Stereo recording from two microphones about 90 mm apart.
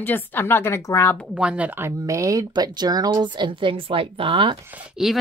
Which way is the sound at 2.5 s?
50° right (ahead or behind).